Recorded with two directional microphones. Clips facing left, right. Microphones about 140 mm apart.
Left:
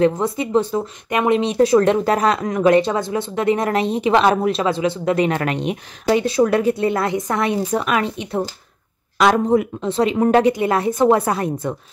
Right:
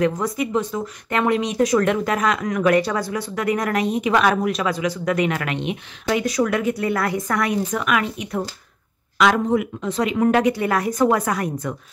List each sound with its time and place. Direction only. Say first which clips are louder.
0.0 s speech: left 3 dB; 30° left (ahead or behind)
1.1 s speech: left 3 dB; 20° left (ahead or behind)
1.4 s speech: left 4 dB; 30° left (ahead or behind)